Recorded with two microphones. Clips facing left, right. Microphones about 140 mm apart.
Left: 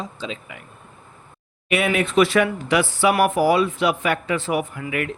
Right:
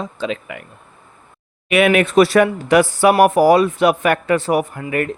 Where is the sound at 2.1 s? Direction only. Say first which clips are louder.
Right 5 dB; 40° right (ahead or behind).